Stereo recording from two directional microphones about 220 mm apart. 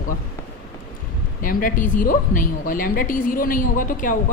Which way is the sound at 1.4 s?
40° left (ahead or behind).